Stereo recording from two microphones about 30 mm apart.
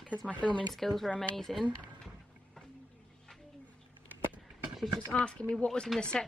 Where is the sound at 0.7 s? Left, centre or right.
Centre.